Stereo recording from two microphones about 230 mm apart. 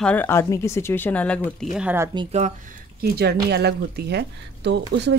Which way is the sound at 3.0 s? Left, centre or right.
Right.